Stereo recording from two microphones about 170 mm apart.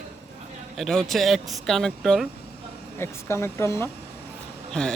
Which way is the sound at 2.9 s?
15° left (ahead or behind).